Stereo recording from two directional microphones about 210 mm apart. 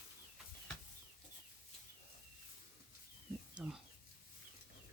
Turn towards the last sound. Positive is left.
turn(degrees=-5)  # may be behind; listen again after turning